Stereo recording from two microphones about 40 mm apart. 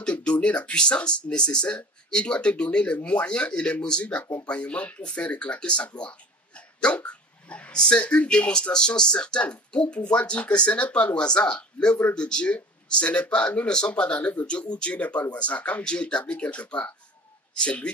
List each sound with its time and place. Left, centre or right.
0.0 s speech: left
5.9 s a sound: left
7.1 s speech: left
15.8 s speech: left